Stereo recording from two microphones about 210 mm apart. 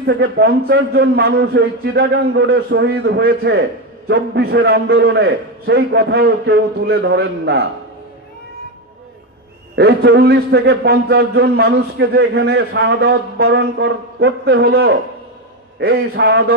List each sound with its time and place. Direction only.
0.0 s a man's voice: 50° right (ahead or behind)
9.8 s a man's voice: 50° right (ahead or behind)